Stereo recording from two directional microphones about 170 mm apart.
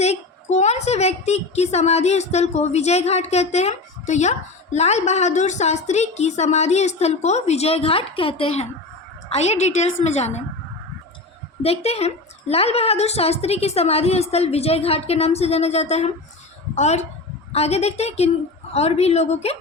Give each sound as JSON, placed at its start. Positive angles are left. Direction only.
{"t": 0.0, "sound": "a woman's voice", "side_deg": 40}
{"t": 11.6, "sound": "a woman's voice", "side_deg": 35}